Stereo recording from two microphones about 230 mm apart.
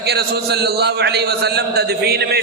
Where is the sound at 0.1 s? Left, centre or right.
Right.